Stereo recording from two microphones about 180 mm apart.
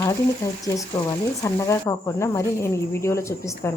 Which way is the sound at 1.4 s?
15° left (ahead or behind).